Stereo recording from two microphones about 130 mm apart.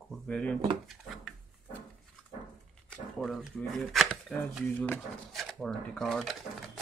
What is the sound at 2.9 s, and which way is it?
Speech, 5° left (ahead or behind).